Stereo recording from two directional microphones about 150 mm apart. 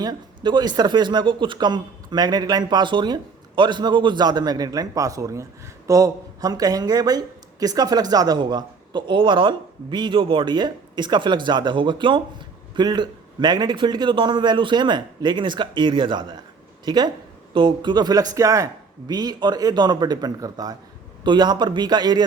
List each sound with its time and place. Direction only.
0.0 s a man's voice: 30° right (ahead or behind)